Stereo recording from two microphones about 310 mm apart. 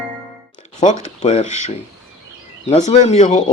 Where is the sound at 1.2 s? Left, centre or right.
Left.